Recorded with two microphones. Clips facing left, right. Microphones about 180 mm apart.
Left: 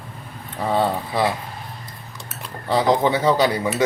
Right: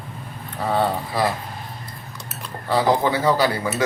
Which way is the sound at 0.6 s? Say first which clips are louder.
Left 1 dB; 15° left (ahead or behind).